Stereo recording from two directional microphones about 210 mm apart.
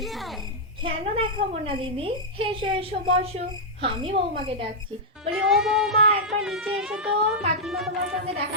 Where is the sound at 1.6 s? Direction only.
25° right (ahead or behind).